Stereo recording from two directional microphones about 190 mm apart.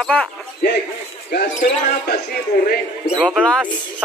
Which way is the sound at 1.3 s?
55° left (ahead or behind).